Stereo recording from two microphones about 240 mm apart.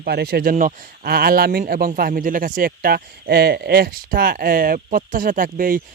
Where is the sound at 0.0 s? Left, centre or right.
Right.